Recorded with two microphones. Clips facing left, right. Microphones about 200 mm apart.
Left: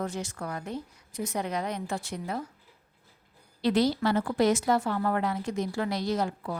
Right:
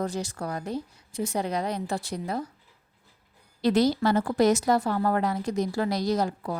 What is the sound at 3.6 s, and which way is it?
A woman's voice, 45° right (ahead or behind).